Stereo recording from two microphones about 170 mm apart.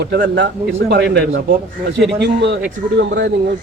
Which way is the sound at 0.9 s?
85° right.